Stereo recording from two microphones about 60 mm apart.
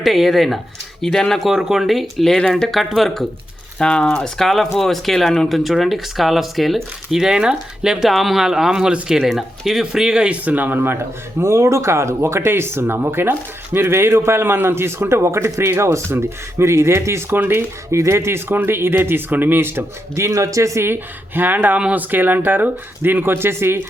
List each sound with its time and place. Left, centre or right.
0.0 s speech: centre
3.8 s speech: centre
10.4 s speech: right
11.3 s speech: right
17.9 s speech: right
20.8 s speech: right
21.8 s speech: centre
22.1 s speech: right